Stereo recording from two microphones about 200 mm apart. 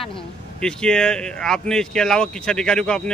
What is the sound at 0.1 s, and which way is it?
Speech, 5° left (ahead or behind).